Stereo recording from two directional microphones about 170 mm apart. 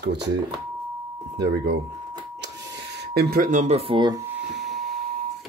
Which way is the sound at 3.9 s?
25° right (ahead or behind).